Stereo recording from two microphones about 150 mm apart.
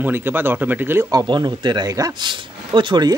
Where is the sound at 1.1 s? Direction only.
30° right (ahead or behind).